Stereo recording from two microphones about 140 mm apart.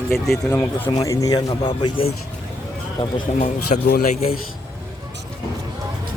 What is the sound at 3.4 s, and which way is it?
Speech, 65° left (ahead or behind).